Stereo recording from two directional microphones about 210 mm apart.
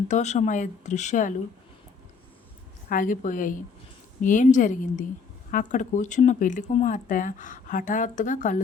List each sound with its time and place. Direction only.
0.1 s speech: 35° left (ahead or behind)
2.9 s speech: 40° left (ahead or behind)